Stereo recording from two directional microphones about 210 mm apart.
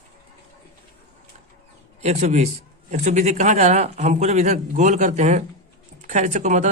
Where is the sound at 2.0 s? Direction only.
30° right (ahead or behind).